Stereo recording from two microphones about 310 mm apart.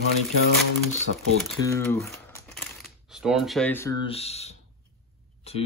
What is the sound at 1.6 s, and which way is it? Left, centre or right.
Speech, centre.